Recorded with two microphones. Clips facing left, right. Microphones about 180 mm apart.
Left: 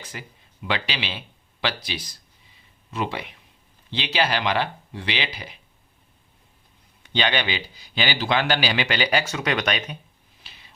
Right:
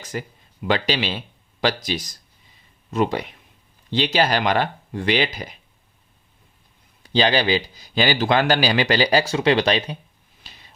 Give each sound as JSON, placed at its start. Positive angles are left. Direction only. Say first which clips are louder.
{"t": 0.0, "sound": "a man's voice", "louder": "right 9 dB", "side_deg": -40}
{"t": 7.0, "sound": "a man's voice", "louder": "right 5 dB", "side_deg": -35}
{"t": 10.4, "sound": "a sound", "louder": "right 3 dB", "side_deg": -40}